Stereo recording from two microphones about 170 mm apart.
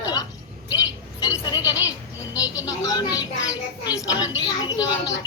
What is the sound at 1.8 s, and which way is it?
A woman's voice, 20° left (ahead or behind).